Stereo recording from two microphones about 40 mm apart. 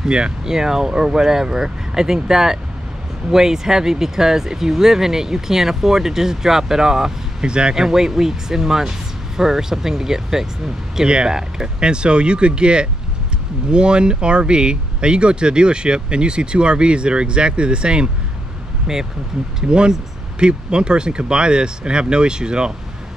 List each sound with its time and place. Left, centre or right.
0.5 s speech: centre
7.7 s speech: centre
18.9 s speech: centre